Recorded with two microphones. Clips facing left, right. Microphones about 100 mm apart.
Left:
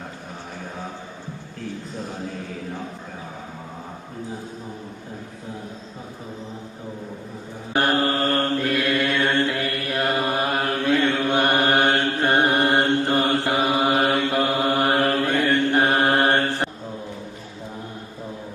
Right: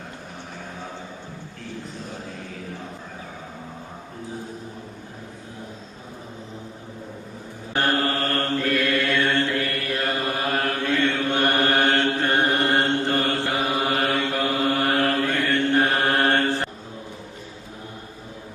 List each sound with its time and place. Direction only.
7.7 s mantra: 15° left (ahead or behind)